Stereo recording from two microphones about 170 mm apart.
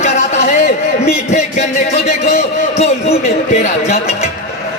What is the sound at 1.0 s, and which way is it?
Speech, 40° left (ahead or behind).